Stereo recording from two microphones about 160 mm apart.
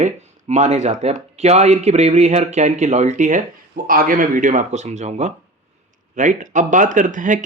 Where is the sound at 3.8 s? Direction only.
60° right (ahead or behind).